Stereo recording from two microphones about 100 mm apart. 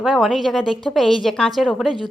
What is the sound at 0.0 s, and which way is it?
A woman's voice, 5° right (ahead or behind).